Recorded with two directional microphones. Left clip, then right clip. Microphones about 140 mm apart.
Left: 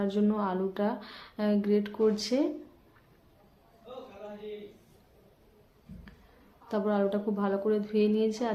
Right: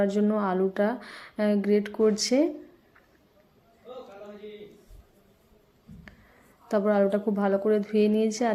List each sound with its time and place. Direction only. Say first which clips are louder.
0.0 s speech: right 5 dB; 30° right (ahead or behind)
6.7 s speech: right 6 dB; 40° right (ahead or behind)